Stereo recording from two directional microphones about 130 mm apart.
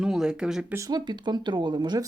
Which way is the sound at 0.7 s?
30° right (ahead or behind).